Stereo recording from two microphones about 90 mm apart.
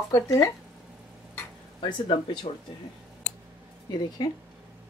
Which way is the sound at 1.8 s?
70° left (ahead or behind).